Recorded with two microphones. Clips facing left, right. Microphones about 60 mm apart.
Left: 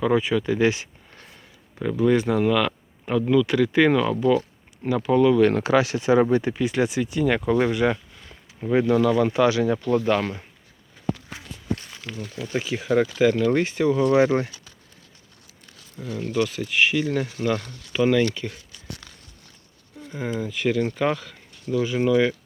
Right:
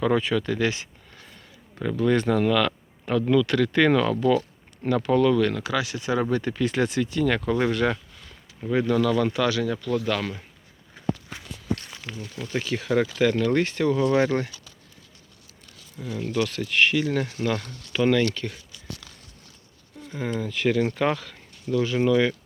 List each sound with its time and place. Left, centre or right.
0.0 s speech: centre; by 1.3 s left
1.8 s speech: centre
5.4 s speech: left
6.3 s speech: centre
12.3 s speech: centre
16.0 s speech: centre
16.3 s speech: centre
20.1 s speech: centre